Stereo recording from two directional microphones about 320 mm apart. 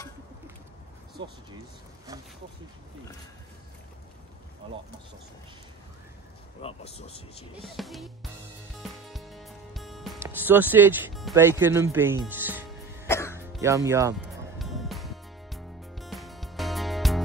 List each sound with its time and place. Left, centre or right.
4.6 s speech: centre
6.6 s speech: centre
7.6 s music: centre
13.0 s music: centre
13.4 s speech: centre
14.6 s music: centre